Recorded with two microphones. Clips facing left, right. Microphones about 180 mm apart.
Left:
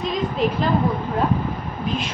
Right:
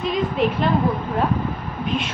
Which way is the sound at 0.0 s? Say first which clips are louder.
Right 1 dB; centre (ahead or behind).